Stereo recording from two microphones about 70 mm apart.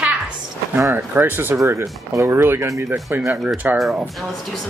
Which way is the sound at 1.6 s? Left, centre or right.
Right.